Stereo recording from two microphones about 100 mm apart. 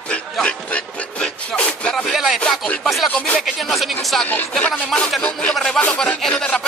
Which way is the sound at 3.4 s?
Centre (ahead or behind).